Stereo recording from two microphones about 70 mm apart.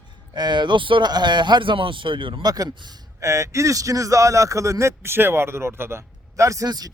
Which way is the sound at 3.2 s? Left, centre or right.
Right.